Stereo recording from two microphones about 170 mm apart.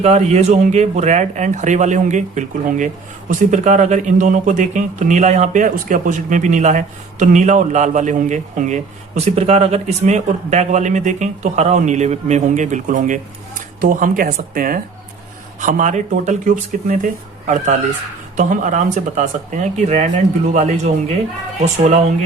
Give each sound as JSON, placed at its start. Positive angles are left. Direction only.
{"t": 0.0, "sound": "speech", "side_deg": -40}